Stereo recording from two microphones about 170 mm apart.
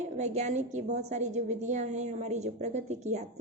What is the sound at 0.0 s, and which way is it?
A woman's voice, 40° right (ahead or behind).